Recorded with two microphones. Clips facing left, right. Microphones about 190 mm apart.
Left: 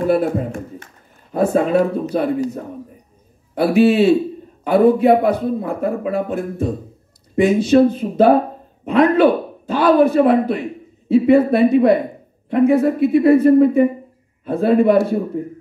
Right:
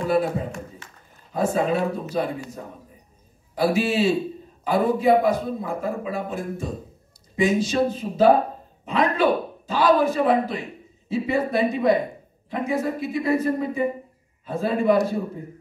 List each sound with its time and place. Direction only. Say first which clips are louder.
0.0 s a sound: left 5 dB; 55° left (ahead or behind)
1.3 s a man's voice: left 6 dB; 60° left (ahead or behind)
3.5 s a man's voice: left 8 dB; 60° left (ahead or behind)